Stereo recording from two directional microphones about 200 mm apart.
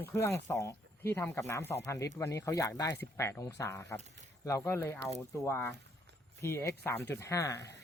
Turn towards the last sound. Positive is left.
turn(degrees=15)  # may be behind; listen again after turning